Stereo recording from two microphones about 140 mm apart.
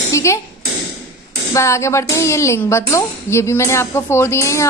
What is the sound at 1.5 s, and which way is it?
A woman's voice, 20° left (ahead or behind).